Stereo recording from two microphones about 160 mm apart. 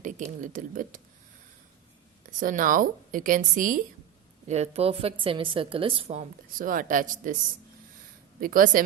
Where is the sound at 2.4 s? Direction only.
55° right (ahead or behind).